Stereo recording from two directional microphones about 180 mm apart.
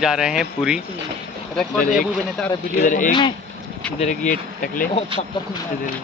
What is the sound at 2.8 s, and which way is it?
Speech, 45° left (ahead or behind).